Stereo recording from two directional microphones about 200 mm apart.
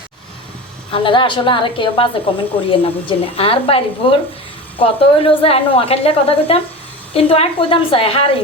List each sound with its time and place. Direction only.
0.9 s a woman's voice: 25° left (ahead or behind)